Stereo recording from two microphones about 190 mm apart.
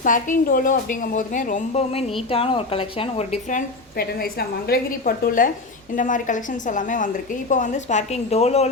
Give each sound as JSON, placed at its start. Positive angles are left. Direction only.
{"t": 0.0, "sound": "a woman's voice", "side_deg": 45}
{"t": 3.9, "sound": "a woman's voice", "side_deg": 55}